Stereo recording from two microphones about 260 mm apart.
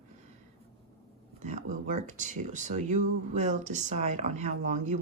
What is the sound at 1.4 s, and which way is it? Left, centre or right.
Speech, right.